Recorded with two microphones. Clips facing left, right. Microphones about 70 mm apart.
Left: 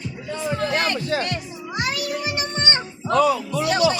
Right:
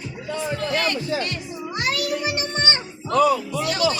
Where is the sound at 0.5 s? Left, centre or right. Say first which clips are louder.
Left 2 dB; left.